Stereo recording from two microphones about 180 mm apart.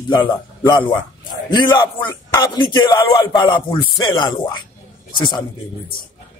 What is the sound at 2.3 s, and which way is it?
A man's voice, 25° left (ahead or behind).